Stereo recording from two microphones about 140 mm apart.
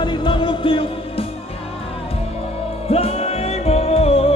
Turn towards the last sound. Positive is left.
turn(degrees=45)  # may be behind; listen again after turning